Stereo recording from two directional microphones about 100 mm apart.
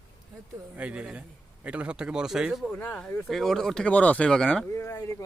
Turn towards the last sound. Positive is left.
turn(degrees=30)  # may be behind; listen again after turning